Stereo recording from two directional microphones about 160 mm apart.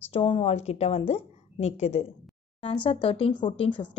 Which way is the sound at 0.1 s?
35° left (ahead or behind).